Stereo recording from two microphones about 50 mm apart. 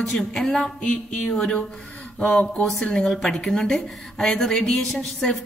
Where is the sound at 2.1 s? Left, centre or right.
Left.